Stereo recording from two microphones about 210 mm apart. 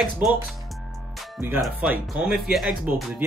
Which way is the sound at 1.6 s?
5° right (ahead or behind).